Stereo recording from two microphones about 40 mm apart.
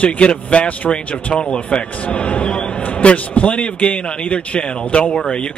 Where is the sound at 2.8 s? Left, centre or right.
Left.